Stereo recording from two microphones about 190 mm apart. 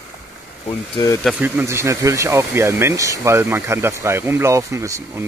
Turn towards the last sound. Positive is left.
turn(degrees=-15)  # may be behind; listen again after turning